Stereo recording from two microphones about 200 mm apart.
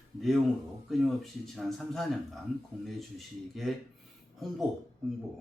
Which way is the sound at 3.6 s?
Centre (ahead or behind).